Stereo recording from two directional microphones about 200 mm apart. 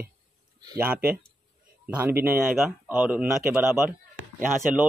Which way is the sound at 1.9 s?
10° right (ahead or behind).